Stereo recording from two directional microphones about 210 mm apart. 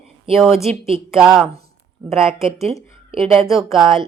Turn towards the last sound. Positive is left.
turn(degrees=0)  # may be behind; listen again after turning